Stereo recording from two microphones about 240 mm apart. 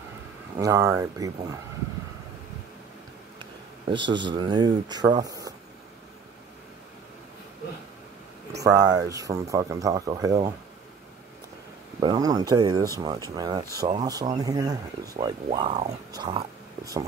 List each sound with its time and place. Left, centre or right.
0.6 s speech: centre
4.1 s speech: centre
8.6 s speech: centre
12.0 s speech: centre